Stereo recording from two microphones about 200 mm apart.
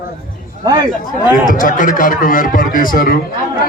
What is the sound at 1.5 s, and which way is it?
A man's voice, 40° left (ahead or behind).